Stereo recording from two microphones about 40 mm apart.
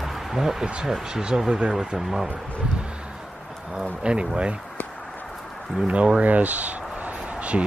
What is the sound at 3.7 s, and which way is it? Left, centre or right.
Speech, right.